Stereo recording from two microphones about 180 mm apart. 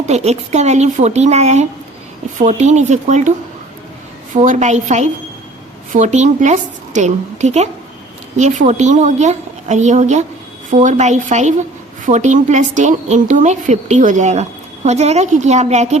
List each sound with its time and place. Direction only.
0.0 s a woman's voice: 35° right (ahead or behind)
4.4 s a woman's voice: 40° right (ahead or behind)